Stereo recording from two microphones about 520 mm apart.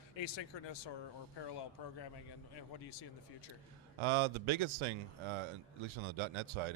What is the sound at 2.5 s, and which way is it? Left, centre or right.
Speech, left.